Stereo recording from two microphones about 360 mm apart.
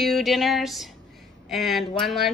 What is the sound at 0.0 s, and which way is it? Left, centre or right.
Speech, centre.